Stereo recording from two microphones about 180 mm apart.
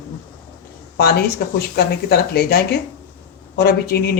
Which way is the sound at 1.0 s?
60° left (ahead or behind).